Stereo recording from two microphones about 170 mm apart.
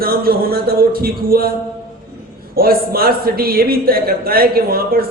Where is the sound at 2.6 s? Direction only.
60° right (ahead or behind).